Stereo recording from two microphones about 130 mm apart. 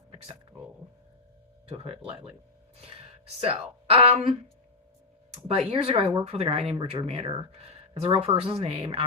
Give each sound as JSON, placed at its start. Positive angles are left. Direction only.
{"t": 0.1, "sound": "a sound", "side_deg": -40}
{"t": 1.6, "sound": "speech", "side_deg": -45}
{"t": 3.4, "sound": "speech", "side_deg": -50}
{"t": 5.5, "sound": "speech", "side_deg": -50}